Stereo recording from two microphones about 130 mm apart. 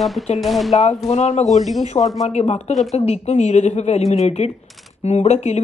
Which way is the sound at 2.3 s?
55° left (ahead or behind).